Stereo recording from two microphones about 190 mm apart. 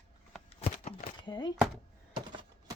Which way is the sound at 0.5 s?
35° left (ahead or behind).